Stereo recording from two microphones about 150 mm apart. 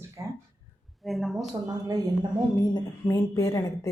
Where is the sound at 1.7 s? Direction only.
25° right (ahead or behind).